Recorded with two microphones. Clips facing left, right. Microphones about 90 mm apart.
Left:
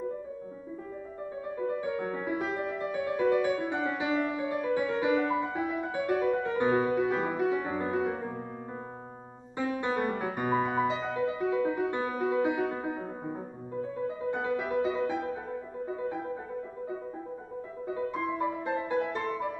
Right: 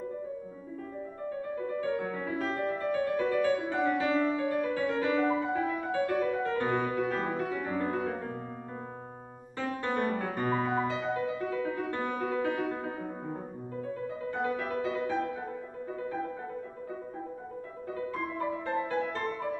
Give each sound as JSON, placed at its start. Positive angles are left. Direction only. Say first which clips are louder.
{"t": 1.7, "sound": "music", "louder": "even", "side_deg": 15}
{"t": 9.6, "sound": "music", "louder": "left 2 dB", "side_deg": 15}
{"t": 17.8, "sound": "music", "louder": "left 3 dB", "side_deg": 15}